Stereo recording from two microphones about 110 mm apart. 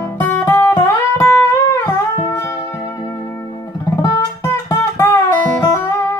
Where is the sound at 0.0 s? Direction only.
20° left (ahead or behind).